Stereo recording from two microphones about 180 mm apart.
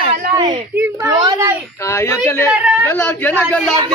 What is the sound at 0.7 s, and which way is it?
Speech, 15° right (ahead or behind).